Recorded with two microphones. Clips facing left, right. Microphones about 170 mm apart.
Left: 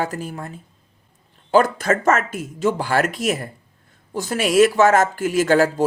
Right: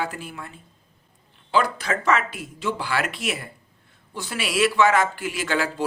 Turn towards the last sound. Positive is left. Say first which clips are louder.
# left 9 dB
turn(degrees=45)  # may be behind; listen again after turning